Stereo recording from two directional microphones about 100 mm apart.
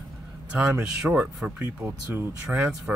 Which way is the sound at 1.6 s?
25° right (ahead or behind).